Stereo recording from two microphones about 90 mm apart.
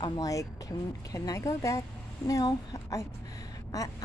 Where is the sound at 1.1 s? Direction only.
35° left (ahead or behind).